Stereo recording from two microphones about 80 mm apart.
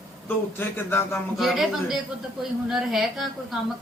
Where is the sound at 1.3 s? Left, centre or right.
Centre.